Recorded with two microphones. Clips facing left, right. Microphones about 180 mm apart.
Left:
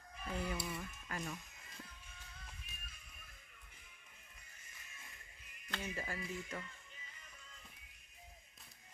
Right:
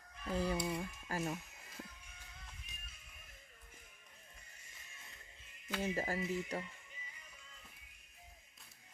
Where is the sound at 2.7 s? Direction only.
20° right (ahead or behind).